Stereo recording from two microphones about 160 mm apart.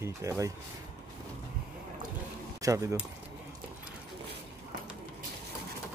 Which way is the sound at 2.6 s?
20° right (ahead or behind).